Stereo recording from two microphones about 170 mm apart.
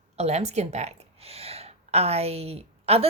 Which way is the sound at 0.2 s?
40° right (ahead or behind).